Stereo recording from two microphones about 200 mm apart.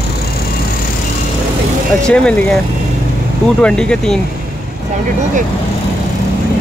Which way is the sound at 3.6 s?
5° left (ahead or behind).